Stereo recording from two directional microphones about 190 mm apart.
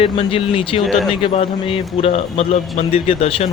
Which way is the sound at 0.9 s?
Centre (ahead or behind).